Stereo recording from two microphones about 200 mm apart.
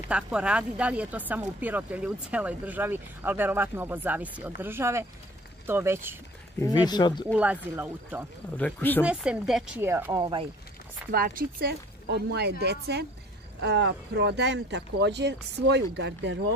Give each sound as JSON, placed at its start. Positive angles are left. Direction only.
{"t": 0.1, "sound": "speech", "side_deg": -5}
{"t": 6.6, "sound": "speech", "side_deg": 20}
{"t": 7.3, "sound": "speech", "side_deg": -5}
{"t": 8.5, "sound": "speech", "side_deg": 10}
{"t": 9.0, "sound": "speech", "side_deg": -5}
{"t": 11.1, "sound": "speech", "side_deg": -45}